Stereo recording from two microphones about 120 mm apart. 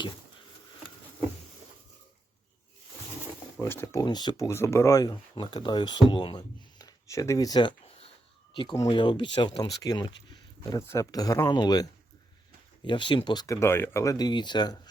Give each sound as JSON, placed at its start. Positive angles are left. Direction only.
{"t": 3.6, "sound": "speech", "side_deg": 20}
{"t": 4.0, "sound": "speech", "side_deg": 35}
{"t": 7.9, "sound": "a sound", "side_deg": 55}
{"t": 8.5, "sound": "speech", "side_deg": 30}
{"t": 13.6, "sound": "speech", "side_deg": 20}